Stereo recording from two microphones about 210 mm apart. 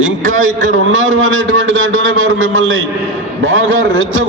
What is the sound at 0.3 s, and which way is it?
Speech, 40° right (ahead or behind).